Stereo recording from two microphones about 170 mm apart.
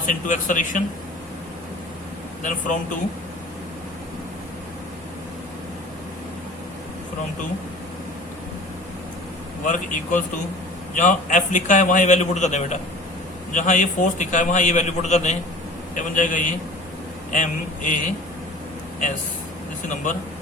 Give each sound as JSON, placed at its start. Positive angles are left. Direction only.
{"t": 0.0, "sound": "a man's voice", "side_deg": 50}
{"t": 2.4, "sound": "a man's voice", "side_deg": 50}
{"t": 9.6, "sound": "a man's voice", "side_deg": 50}